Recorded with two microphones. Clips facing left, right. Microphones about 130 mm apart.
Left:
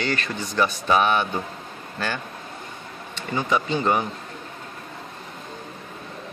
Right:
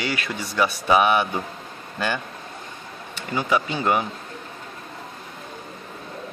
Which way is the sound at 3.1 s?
10° right (ahead or behind).